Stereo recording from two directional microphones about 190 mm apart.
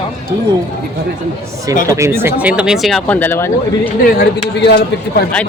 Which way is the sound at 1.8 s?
15° right (ahead or behind).